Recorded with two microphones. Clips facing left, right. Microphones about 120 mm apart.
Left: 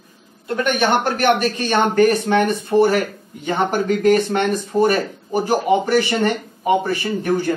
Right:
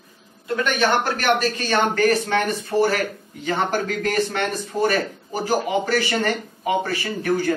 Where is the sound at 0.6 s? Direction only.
15° left (ahead or behind).